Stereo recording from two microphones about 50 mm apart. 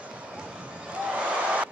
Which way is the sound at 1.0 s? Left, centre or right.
Right.